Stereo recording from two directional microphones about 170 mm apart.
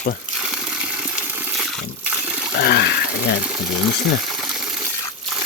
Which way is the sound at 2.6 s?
70° left (ahead or behind).